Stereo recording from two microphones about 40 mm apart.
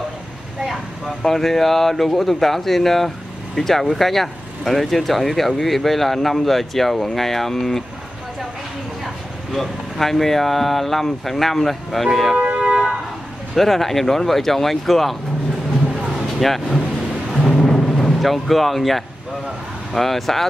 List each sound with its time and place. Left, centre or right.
0.7 s speech: centre
9.0 s speech: centre
12.5 s a sound: centre
13.6 s speech: centre
16.3 s speech: centre
17.6 s music: centre
19.9 s speech: centre